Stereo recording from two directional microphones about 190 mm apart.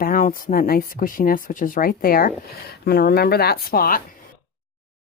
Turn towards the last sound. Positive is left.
turn(degrees=50)  # may be behind; listen again after turning